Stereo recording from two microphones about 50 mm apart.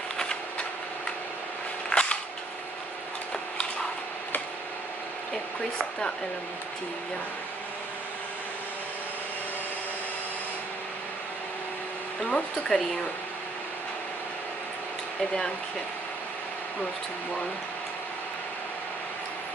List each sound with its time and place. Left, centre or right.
0.2 s a sound: centre
1.9 s cap gun: centre
12.2 s speech: left